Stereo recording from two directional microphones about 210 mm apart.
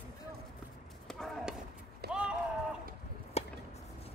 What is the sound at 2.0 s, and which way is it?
Run, 50° right (ahead or behind).